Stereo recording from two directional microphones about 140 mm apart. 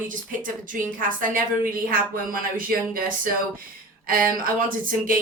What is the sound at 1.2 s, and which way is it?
Speech, 90° right.